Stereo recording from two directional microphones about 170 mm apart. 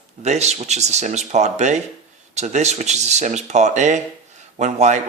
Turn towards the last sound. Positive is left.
turn(degrees=-45)  # may be behind; listen again after turning